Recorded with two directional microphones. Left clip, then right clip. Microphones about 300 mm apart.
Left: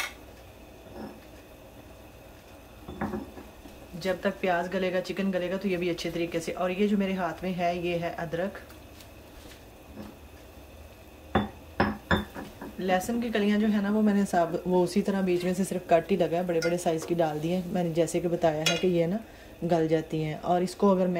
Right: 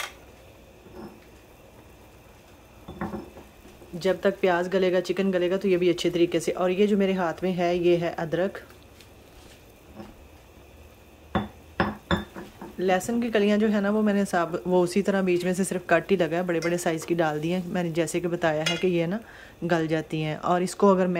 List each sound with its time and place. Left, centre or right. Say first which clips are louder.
4.0 s speech: right 5 dB; centre
12.7 s a woman's voice: right 3 dB; centre